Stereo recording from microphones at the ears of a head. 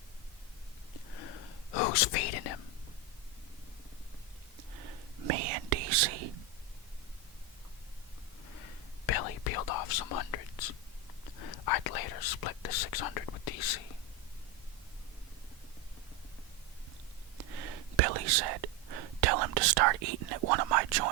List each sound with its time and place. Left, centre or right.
0.9 s whispering: left
4.5 s whispering: right
8.4 s whispering: left
17.3 s whispering: right